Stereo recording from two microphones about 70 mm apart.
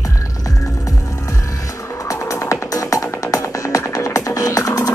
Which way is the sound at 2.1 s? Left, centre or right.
Left.